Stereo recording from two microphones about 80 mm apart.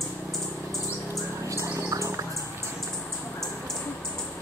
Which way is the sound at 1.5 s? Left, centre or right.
Right.